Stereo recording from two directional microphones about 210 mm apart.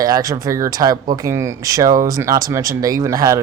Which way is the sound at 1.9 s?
40° right (ahead or behind).